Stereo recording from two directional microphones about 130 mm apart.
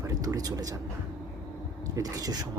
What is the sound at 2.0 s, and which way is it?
Speech, 30° right (ahead or behind).